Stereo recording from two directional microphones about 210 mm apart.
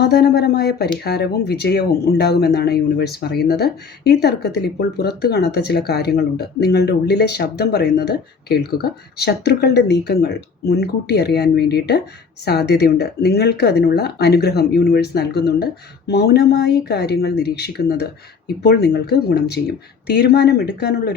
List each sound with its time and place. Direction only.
0.0 s speech: 50° left (ahead or behind)